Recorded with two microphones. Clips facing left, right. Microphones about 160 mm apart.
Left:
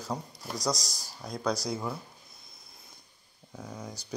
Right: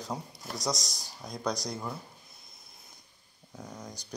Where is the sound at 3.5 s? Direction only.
Centre (ahead or behind).